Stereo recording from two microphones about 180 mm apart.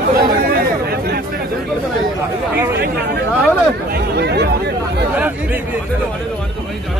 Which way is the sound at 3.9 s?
65° right (ahead or behind).